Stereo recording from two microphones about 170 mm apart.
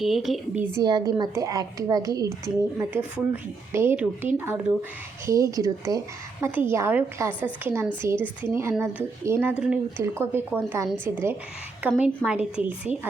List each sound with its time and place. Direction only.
0.0 s a woman's voice: centre (ahead or behind)
0.6 s a woman's voice: 20° right (ahead or behind)